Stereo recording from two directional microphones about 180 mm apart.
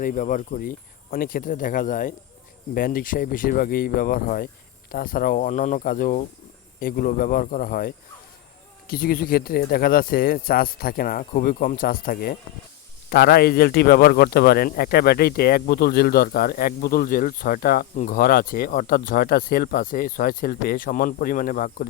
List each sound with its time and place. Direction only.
0.0 s speech: 45° left (ahead or behind)